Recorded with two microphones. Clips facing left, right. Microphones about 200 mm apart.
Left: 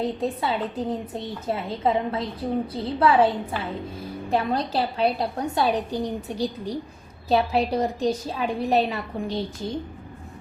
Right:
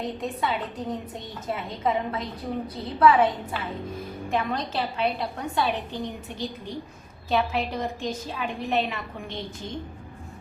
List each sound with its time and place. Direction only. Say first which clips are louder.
0.2 s a woman's voice: left 3 dB; 30° left (ahead or behind)
4.3 s a woman's voice: left 4 dB; 35° left (ahead or behind)